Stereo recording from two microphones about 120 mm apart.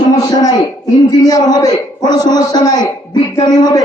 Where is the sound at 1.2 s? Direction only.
30° left (ahead or behind).